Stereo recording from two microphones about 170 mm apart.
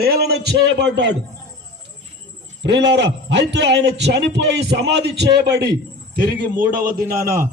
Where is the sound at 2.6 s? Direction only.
90° right.